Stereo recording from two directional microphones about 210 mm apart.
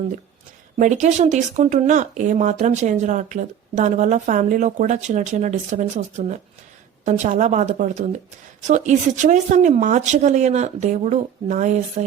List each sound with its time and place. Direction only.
0.8 s speech: 35° right (ahead or behind)